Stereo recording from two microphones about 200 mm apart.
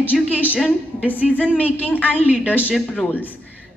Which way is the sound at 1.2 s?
5° right (ahead or behind).